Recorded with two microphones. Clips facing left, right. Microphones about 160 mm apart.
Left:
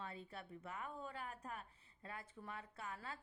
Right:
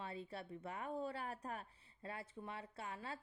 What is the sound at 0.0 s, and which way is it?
A woman's voice, 30° right (ahead or behind).